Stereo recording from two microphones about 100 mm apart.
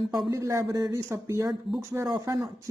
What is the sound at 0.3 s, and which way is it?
Speech, 35° right (ahead or behind).